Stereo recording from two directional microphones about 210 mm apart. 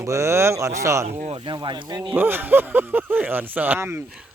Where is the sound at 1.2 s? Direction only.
25° right (ahead or behind).